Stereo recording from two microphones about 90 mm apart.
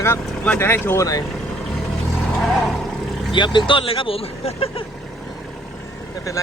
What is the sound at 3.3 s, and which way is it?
Speech, 60° left (ahead or behind).